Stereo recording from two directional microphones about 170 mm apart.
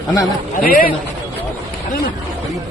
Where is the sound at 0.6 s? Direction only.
60° left (ahead or behind).